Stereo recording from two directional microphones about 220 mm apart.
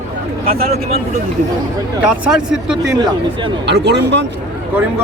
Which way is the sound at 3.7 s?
50° right (ahead or behind).